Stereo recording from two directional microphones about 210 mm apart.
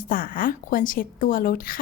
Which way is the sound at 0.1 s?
40° left (ahead or behind).